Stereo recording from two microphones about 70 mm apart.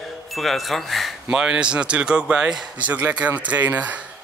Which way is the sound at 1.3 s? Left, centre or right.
Centre.